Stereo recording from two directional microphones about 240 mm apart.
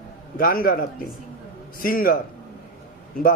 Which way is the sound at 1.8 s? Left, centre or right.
Left.